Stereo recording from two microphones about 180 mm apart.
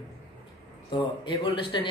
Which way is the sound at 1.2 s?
25° left (ahead or behind).